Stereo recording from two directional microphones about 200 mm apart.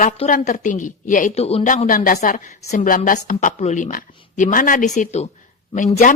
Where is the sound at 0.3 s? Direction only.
40° left (ahead or behind).